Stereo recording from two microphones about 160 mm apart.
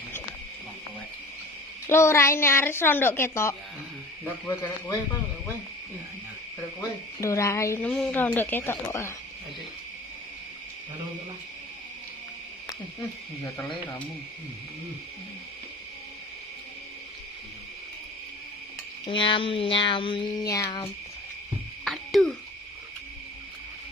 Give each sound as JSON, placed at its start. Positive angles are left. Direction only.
{"t": 1.9, "sound": "speech", "side_deg": 15}
{"t": 7.2, "sound": "speech", "side_deg": 20}
{"t": 19.0, "sound": "speech", "side_deg": 30}
{"t": 21.8, "sound": "owl", "side_deg": 0}